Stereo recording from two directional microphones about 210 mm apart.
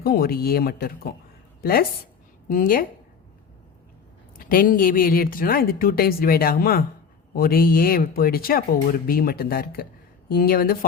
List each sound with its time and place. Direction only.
0.0 s a woman's voice: 45° left (ahead or behind)
4.4 s a woman's voice: 45° left (ahead or behind)